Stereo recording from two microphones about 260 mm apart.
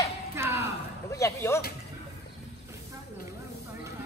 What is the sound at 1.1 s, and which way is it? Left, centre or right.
Speech, centre.